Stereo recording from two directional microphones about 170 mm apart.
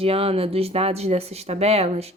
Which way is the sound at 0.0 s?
35° right (ahead or behind).